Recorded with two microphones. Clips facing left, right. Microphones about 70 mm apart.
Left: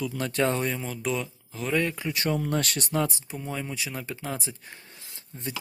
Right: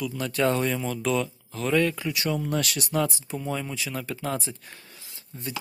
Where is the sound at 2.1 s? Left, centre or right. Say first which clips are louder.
Even; left.